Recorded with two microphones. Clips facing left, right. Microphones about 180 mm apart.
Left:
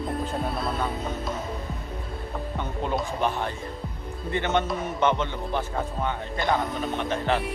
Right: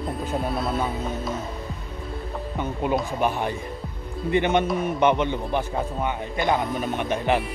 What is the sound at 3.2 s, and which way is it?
Speech, 10° right (ahead or behind).